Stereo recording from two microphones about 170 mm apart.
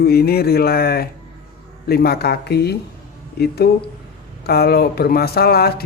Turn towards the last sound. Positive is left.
turn(degrees=65)  # may be behind; listen again after turning